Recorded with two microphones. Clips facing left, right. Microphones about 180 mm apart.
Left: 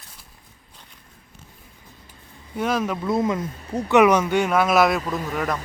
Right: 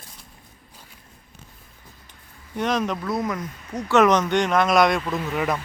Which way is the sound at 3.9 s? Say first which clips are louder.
Left 1 dB; 10° left (ahead or behind).